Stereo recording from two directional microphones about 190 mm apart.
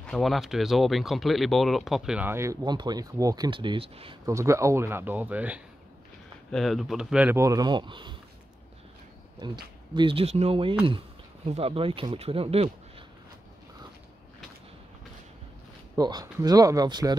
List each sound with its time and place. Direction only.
0.0 s speech: centre (ahead or behind); by 4.2 s 30° right (ahead or behind)
4.3 s speech: 15° right (ahead or behind)
9.4 s speech: 20° right (ahead or behind)
16.0 s speech: 20° right (ahead or behind)